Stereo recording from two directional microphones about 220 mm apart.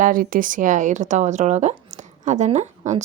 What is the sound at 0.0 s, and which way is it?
A woman's voice, 40° right (ahead or behind).